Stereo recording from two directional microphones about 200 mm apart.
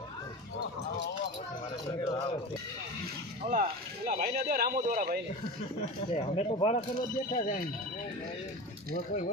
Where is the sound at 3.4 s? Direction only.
40° right (ahead or behind).